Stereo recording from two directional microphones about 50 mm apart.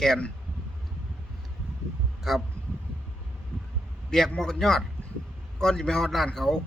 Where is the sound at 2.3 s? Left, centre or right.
Centre.